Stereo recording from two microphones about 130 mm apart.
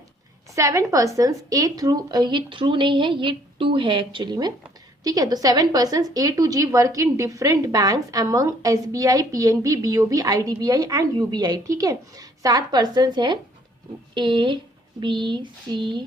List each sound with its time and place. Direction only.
0.5 s a woman's voice: 25° right (ahead or behind)